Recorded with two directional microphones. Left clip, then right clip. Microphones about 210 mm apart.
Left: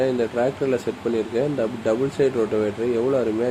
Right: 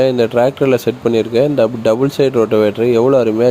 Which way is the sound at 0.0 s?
40° right (ahead or behind).